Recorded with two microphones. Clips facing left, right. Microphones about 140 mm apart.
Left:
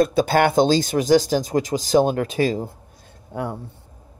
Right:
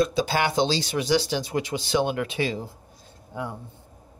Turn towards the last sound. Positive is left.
turn(degrees=55)  # may be behind; listen again after turning